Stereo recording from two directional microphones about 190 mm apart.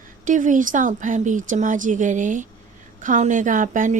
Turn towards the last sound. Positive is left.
turn(degrees=-40)  # may be behind; listen again after turning